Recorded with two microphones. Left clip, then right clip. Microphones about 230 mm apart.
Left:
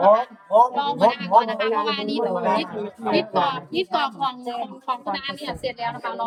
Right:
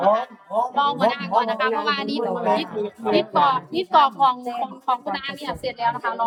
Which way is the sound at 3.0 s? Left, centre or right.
Centre.